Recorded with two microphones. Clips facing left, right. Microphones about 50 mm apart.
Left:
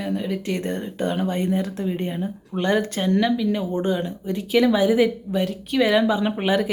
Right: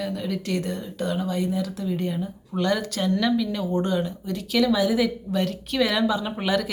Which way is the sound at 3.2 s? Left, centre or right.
Centre.